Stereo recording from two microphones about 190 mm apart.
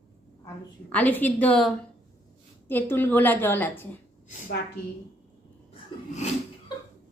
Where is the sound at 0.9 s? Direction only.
10° left (ahead or behind).